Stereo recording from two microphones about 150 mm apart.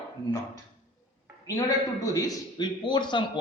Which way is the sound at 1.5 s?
25° left (ahead or behind).